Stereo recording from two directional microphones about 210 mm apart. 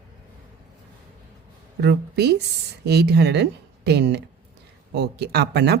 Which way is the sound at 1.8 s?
50° right (ahead or behind).